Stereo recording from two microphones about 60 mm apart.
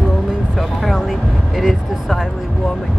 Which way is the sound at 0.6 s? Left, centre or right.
Centre.